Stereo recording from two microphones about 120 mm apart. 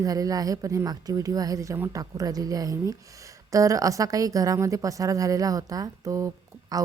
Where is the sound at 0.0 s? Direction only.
30° right (ahead or behind).